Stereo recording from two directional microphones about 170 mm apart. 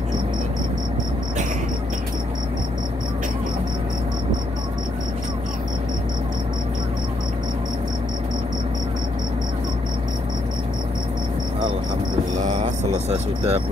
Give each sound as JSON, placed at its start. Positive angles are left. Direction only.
{"t": 12.5, "sound": "vehicle", "side_deg": -40}